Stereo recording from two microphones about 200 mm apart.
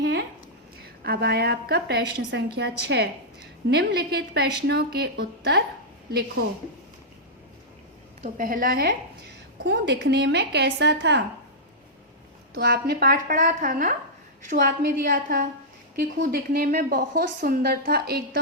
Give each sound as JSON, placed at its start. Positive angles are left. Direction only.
{"t": 0.0, "sound": "a sound", "side_deg": -60}
{"t": 1.0, "sound": "a woman's voice", "side_deg": -50}
{"t": 8.2, "sound": "a woman's voice", "side_deg": -40}
{"t": 12.5, "sound": "a woman's voice", "side_deg": -50}